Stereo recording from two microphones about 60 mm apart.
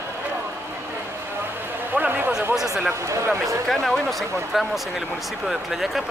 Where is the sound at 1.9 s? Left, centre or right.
Right.